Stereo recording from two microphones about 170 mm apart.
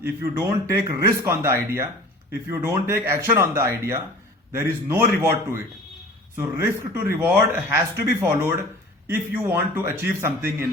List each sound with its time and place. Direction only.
0.0 s speech: 15° right (ahead or behind)